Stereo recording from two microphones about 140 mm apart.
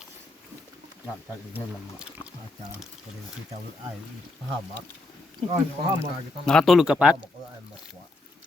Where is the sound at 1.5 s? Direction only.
15° right (ahead or behind).